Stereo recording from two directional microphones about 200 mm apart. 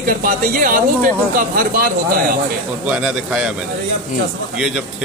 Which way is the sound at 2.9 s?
5° right (ahead or behind).